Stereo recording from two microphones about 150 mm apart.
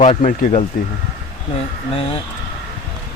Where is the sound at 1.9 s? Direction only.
40° left (ahead or behind).